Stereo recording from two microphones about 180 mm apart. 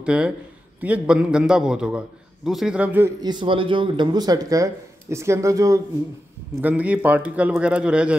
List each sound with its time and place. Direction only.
0.0 s a man's voice: 5° right (ahead or behind)
3.2 s a man's voice: 25° right (ahead or behind); by 8.2 s 5° right (ahead or behind)